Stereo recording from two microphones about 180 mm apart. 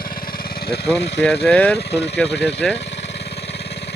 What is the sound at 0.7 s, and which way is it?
Speech, 70° left (ahead or behind).